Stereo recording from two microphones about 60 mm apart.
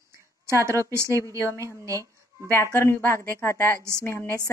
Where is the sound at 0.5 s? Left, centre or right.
Right.